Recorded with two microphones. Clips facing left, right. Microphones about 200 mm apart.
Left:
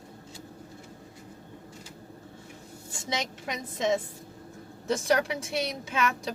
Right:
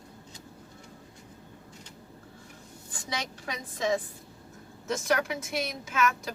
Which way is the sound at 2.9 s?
20° left (ahead or behind).